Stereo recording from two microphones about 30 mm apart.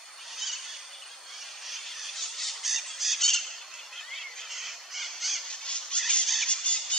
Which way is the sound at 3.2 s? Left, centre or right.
Centre.